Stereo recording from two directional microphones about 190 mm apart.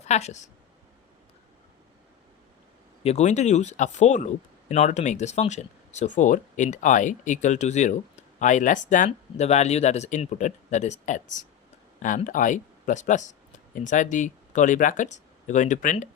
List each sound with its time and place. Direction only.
0.0 s a woman's voice: 35° left (ahead or behind)
3.0 s speech: 35° left (ahead or behind)